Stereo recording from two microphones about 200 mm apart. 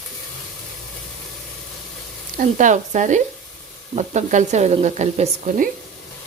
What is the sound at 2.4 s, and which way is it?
Speech, 40° right (ahead or behind).